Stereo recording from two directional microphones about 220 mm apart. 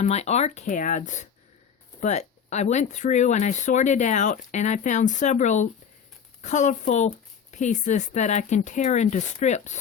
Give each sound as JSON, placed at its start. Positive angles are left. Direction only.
{"t": 0.0, "sound": "speech", "side_deg": 30}